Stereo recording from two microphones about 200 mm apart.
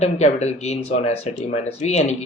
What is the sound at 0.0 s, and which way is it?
Speech, 35° left (ahead or behind).